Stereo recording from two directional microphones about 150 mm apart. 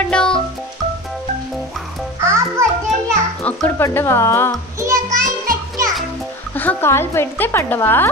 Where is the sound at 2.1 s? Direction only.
20° right (ahead or behind).